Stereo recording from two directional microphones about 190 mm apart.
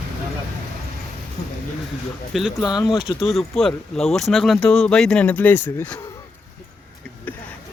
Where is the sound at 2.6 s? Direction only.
20° left (ahead or behind).